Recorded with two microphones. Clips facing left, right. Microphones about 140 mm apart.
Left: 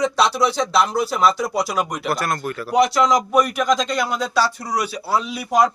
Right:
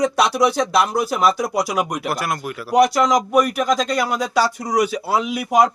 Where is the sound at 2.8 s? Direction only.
45° right (ahead or behind).